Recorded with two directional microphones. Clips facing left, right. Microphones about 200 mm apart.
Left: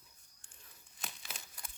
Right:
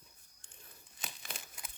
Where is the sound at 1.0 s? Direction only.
Centre (ahead or behind).